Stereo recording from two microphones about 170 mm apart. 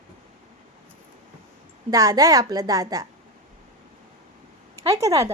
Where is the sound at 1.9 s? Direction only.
20° right (ahead or behind).